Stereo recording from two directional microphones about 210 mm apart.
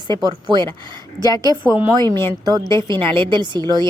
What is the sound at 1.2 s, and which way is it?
Speech, 20° left (ahead or behind).